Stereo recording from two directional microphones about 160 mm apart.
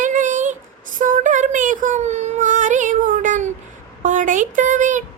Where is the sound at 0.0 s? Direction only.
50° right (ahead or behind).